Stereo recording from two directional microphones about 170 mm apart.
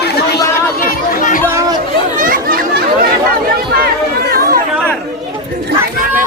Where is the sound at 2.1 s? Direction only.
55° right (ahead or behind).